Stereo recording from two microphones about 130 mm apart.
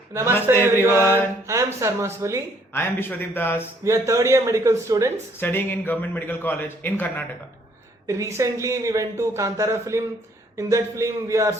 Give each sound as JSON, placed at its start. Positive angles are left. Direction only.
{"t": 0.1, "sound": "a man's voice", "side_deg": -20}
{"t": 0.6, "sound": "mantra", "side_deg": -15}
{"t": 1.0, "sound": "speech", "side_deg": -20}
{"t": 2.7, "sound": "a man's voice", "side_deg": 15}
{"t": 3.8, "sound": "speech", "side_deg": -25}
{"t": 5.4, "sound": "a man's voice", "side_deg": 15}
{"t": 8.0, "sound": "speech", "side_deg": -20}